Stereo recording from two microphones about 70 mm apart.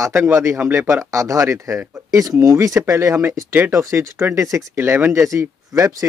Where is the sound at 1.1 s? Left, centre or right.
Right.